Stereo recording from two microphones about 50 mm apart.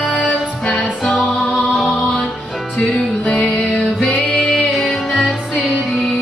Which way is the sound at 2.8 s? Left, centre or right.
Centre.